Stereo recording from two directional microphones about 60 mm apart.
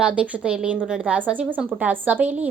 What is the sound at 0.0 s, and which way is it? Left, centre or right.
A woman's voice, right.